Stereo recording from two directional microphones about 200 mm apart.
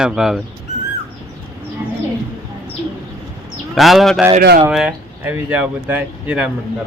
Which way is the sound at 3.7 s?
Centre (ahead or behind).